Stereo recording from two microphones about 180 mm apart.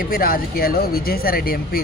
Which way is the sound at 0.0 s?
55° left (ahead or behind).